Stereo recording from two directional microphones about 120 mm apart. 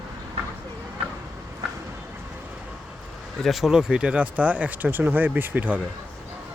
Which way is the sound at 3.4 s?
Centre (ahead or behind).